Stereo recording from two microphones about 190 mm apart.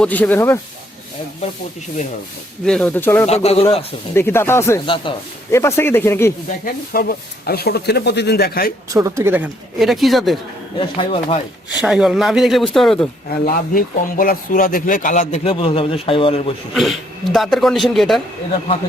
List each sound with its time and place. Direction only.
0.0 s speech: 10° left (ahead or behind)
2.6 s speech: 5° left (ahead or behind)
3.2 s speech: 35° left (ahead or behind)
4.1 s speech: 10° left (ahead or behind)
6.9 s speech: 50° left (ahead or behind)
8.9 s speech: 15° right (ahead or behind); by 10.3 s centre (ahead or behind)
10.8 s speech: 30° left (ahead or behind)
11.8 s speech: 5° right (ahead or behind)
13.4 s speech: 50° left (ahead or behind); by 16.5 s 30° left (ahead or behind)
16.7 s speech: centre (ahead or behind)